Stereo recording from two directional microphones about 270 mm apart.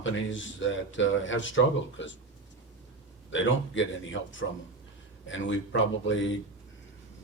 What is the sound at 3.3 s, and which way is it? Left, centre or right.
Speech, left.